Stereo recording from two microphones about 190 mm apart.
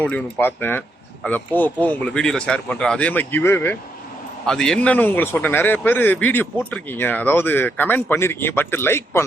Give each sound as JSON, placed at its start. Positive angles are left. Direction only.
{"t": 0.0, "sound": "speech", "side_deg": 10}